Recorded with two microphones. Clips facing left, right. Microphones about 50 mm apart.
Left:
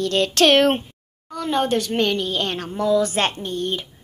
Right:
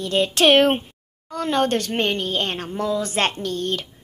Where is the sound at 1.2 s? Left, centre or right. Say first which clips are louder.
Even; right.